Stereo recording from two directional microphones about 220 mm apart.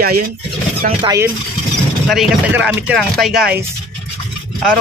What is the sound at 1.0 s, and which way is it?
Speech, 15° right (ahead or behind).